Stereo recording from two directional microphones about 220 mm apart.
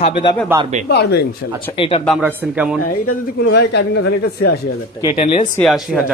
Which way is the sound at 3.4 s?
50° left (ahead or behind).